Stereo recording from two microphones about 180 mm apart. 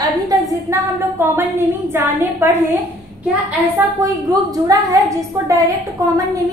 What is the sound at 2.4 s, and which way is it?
Speech, 15° right (ahead or behind).